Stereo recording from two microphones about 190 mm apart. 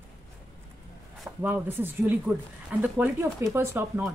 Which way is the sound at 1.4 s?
10° right (ahead or behind).